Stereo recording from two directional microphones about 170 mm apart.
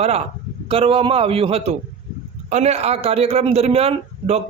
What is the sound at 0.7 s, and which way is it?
Speech, 35° right (ahead or behind).